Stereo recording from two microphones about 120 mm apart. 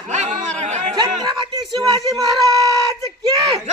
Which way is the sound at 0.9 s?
35° right (ahead or behind).